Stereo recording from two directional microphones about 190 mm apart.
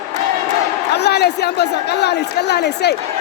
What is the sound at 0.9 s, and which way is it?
Speech, 60° left (ahead or behind).